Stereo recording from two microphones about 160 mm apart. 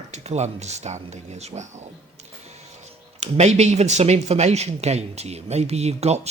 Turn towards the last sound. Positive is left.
turn(degrees=-40)  # may be behind; listen again after turning